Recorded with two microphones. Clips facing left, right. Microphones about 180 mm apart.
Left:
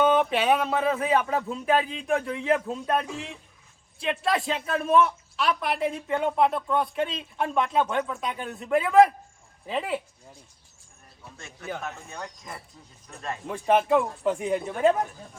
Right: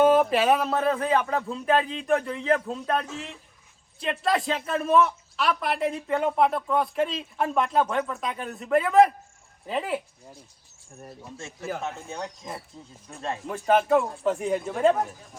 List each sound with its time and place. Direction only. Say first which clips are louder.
0.0 s a man's voice: right 3 dB; 5° right (ahead or behind)
11.8 s speech: right 3 dB; 25° right (ahead or behind)
13.5 s a man's voice: even; centre (ahead or behind)